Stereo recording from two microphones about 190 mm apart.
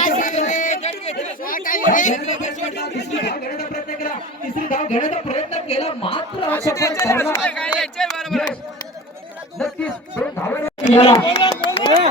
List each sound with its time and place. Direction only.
0.0 s a sound: 45° left (ahead or behind)
1.2 s speech: 45° left (ahead or behind)
2.7 s speech: 60° left (ahead or behind)
4.7 s speech: 40° left (ahead or behind); by 8.4 s centre (ahead or behind)
9.6 s speech: 10° left (ahead or behind)
10.8 s speech: 30° left (ahead or behind)